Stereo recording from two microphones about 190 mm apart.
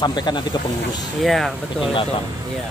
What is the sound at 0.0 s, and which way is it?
Speech, 20° left (ahead or behind).